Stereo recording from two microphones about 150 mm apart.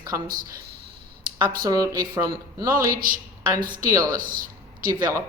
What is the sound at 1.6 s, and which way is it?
Speech, 25° right (ahead or behind).